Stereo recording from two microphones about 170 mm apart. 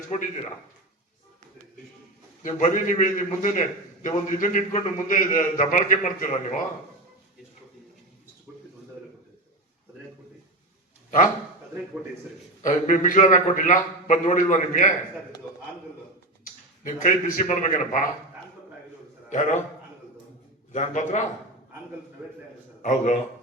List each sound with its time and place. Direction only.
0.1 s a man's voice: 45° left (ahead or behind)
2.4 s a man's voice: 45° left (ahead or behind)
12.6 s a man's voice: 50° left (ahead or behind)
16.4 s a sound: 50° left (ahead or behind)
17.4 s a man's voice: 45° left (ahead or behind)
19.3 s a man's voice: 45° left (ahead or behind)
20.7 s a man's voice: 45° left (ahead or behind)
22.8 s a man's voice: 45° left (ahead or behind)